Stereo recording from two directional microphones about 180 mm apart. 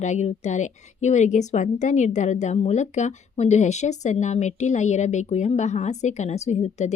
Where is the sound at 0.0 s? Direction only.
40° left (ahead or behind).